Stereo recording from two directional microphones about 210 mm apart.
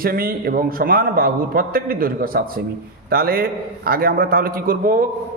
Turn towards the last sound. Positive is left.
turn(degrees=-40)  # may be behind; listen again after turning